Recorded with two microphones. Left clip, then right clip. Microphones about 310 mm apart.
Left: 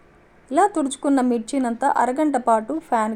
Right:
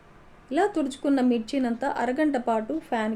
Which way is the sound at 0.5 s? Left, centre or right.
Centre.